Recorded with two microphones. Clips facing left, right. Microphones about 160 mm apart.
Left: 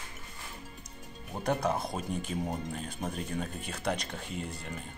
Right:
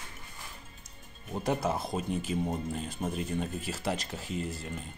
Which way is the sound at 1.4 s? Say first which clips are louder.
Even; 5° right (ahead or behind).